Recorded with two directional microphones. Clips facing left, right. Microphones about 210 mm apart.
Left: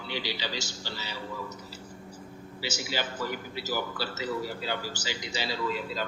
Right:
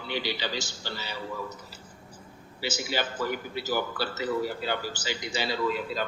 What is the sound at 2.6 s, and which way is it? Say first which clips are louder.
A man's voice: right 3 dB; 55° right (ahead or behind).